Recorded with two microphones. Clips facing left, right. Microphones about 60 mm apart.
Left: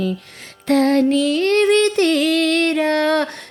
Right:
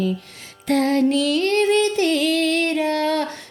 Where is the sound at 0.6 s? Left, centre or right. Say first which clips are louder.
Left 4 dB; left.